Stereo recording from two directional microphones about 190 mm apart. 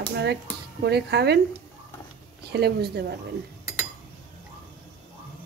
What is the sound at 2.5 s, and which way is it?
Speech, 60° right (ahead or behind).